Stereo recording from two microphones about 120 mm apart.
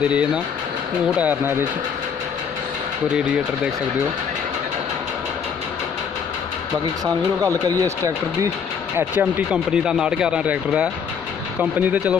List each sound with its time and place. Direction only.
0.0 s speech: 10° right (ahead or behind)
7.4 s speech: 30° right (ahead or behind)
8.9 s speech: 15° right (ahead or behind)